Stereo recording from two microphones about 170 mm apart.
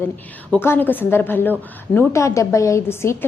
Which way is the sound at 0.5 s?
10° left (ahead or behind).